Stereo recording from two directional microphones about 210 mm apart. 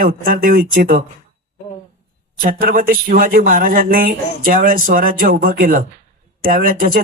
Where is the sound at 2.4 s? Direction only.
40° right (ahead or behind).